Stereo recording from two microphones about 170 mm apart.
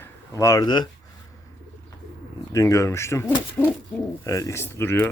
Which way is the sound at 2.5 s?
20° left (ahead or behind).